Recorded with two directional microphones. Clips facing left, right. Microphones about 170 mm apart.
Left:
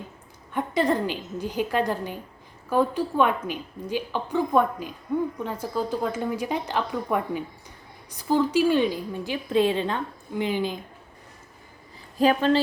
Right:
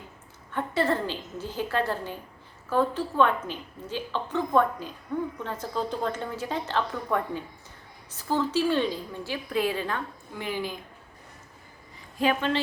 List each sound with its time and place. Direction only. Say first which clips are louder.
0.5 s a woman's voice: left 3 dB; 15° left (ahead or behind)
12.2 s a woman's voice: left 5 dB; 35° left (ahead or behind)